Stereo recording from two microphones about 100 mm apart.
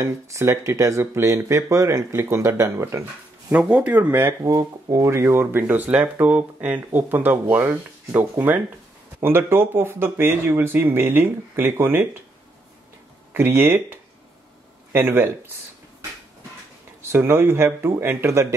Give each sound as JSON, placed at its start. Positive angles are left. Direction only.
{"t": 0.0, "sound": "speech", "side_deg": -30}
{"t": 3.5, "sound": "speech", "side_deg": -15}
{"t": 13.3, "sound": "speech", "side_deg": -25}
{"t": 17.1, "sound": "speech", "side_deg": -20}